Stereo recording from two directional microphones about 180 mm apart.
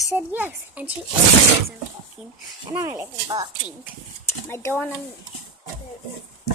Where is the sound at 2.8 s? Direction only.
20° right (ahead or behind).